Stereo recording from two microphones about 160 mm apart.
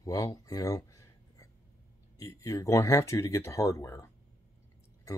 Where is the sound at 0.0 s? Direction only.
20° left (ahead or behind).